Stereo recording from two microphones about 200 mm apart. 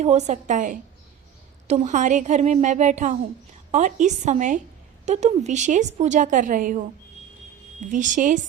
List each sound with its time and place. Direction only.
0.0 s a woman's voice: 35° right (ahead or behind)